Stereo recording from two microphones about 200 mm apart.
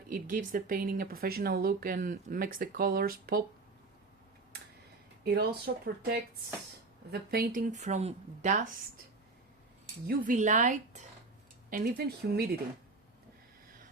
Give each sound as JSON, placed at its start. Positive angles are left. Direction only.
{"t": 0.1, "sound": "speech", "side_deg": -40}
{"t": 5.2, "sound": "speech", "side_deg": -50}
{"t": 10.1, "sound": "speech", "side_deg": -45}
{"t": 11.7, "sound": "speech", "side_deg": -50}